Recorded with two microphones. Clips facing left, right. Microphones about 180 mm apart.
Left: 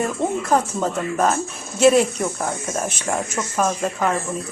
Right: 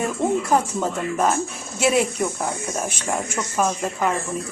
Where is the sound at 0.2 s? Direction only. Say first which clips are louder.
Right 3 dB; 20° left (ahead or behind).